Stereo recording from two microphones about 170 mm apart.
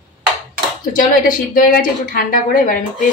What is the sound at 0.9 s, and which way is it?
A woman's voice, 55° left (ahead or behind).